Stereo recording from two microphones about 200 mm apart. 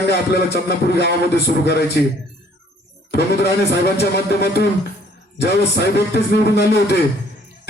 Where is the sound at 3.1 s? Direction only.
55° left (ahead or behind).